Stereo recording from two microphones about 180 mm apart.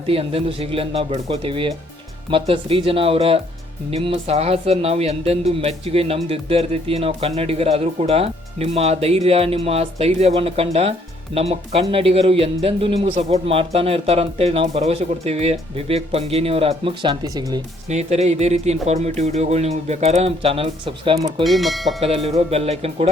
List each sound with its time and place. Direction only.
0.1 s speech: 30° right (ahead or behind)
17.8 s speech: 40° right (ahead or behind)
21.4 s speech: centre (ahead or behind)
22.0 s speech: 35° right (ahead or behind)